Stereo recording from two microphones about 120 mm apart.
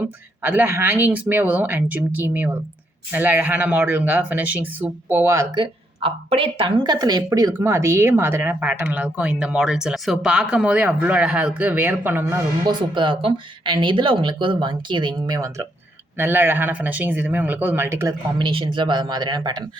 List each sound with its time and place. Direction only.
0.0 s speech: 15° right (ahead or behind)
5.5 s speech: 50° right (ahead or behind); by 12.4 s 15° right (ahead or behind)
12.6 s speech: 40° right (ahead or behind)
16.1 s speech: 15° right (ahead or behind)
18.3 s speech: 45° right (ahead or behind)